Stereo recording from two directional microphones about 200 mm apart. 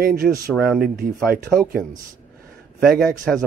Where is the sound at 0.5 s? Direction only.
Centre (ahead or behind).